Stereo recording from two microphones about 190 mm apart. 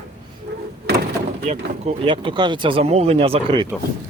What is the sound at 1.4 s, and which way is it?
Speech, 35° right (ahead or behind).